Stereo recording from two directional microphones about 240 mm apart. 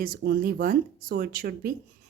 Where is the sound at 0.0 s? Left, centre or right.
Right.